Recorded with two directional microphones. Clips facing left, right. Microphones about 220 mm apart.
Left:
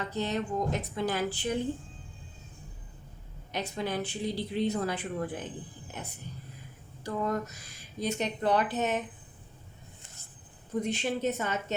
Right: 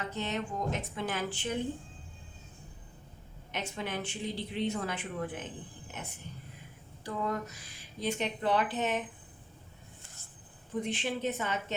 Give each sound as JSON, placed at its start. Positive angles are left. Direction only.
{"t": 0.1, "sound": "a woman's voice", "side_deg": 35}
{"t": 3.5, "sound": "a woman's voice", "side_deg": 35}
{"t": 7.0, "sound": "a sound", "side_deg": 45}
{"t": 8.0, "sound": "a woman's voice", "side_deg": 40}
{"t": 10.8, "sound": "a woman's voice", "side_deg": 40}